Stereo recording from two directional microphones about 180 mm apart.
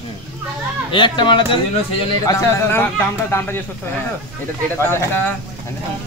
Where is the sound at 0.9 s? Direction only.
25° left (ahead or behind).